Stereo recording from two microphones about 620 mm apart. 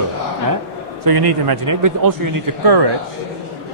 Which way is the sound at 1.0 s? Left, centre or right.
Right.